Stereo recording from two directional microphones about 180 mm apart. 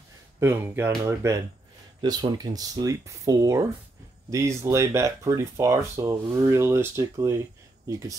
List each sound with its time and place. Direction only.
0.4 s speech: 10° right (ahead or behind)